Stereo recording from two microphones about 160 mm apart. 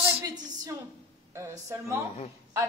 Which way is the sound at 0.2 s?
20° right (ahead or behind).